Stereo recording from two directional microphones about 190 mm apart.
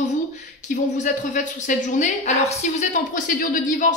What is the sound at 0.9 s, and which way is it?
Speech, 40° left (ahead or behind).